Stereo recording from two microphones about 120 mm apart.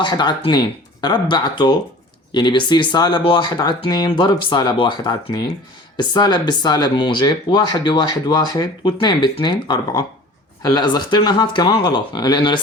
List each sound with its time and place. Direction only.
0.0 s speech: 40° left (ahead or behind)